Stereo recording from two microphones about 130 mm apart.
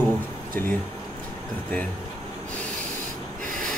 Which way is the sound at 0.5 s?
15° left (ahead or behind).